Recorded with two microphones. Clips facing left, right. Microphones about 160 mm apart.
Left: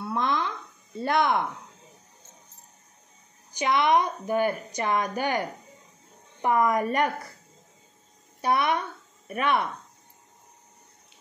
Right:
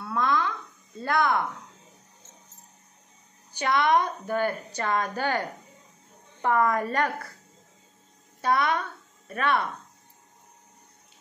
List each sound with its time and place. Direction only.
0.0 s a sound: 20° left (ahead or behind)
1.0 s speech: 20° left (ahead or behind)
3.5 s a woman's voice: 20° left (ahead or behind)
8.4 s a child's voice: 20° left (ahead or behind)